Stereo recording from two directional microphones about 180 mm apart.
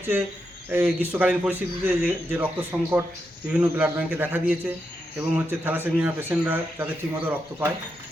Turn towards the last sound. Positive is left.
turn(degrees=-10)  # may be behind; listen again after turning